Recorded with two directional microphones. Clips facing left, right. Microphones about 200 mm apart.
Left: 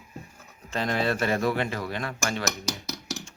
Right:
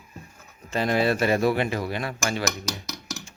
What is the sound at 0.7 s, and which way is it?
Speech, 5° right (ahead or behind).